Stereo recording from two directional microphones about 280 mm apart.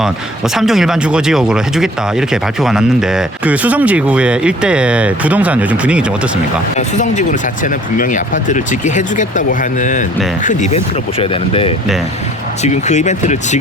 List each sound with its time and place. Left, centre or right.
0.0 s speech: centre
6.7 s speech: left